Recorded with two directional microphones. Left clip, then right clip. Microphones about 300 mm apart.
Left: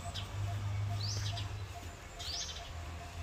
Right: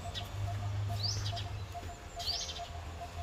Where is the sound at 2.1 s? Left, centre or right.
Right.